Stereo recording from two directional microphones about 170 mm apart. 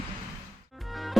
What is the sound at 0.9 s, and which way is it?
Music, centre (ahead or behind).